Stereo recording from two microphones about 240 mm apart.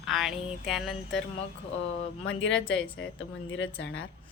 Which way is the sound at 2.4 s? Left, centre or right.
Left.